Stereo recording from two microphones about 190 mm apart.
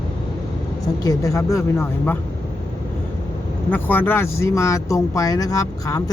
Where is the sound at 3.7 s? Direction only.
10° left (ahead or behind).